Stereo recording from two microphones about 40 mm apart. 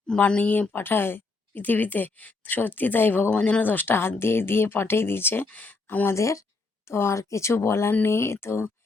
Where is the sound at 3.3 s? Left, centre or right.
Left.